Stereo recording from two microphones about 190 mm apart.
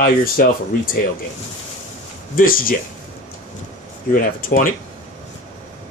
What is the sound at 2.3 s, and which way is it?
Speech, 50° left (ahead or behind).